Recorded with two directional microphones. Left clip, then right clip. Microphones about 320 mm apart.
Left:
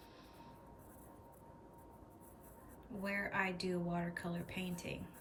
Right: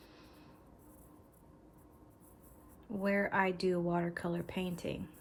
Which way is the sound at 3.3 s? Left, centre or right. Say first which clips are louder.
Right 6 dB; centre.